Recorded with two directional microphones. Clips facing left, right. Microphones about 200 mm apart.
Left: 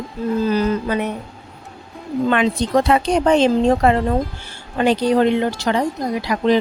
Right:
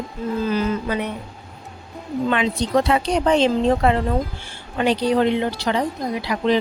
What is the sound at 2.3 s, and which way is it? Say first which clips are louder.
Speech: left 3 dB; 50° left (ahead or behind).